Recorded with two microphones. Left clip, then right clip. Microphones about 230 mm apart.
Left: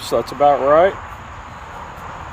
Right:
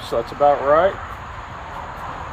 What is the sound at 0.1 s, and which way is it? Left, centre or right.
Speech, left.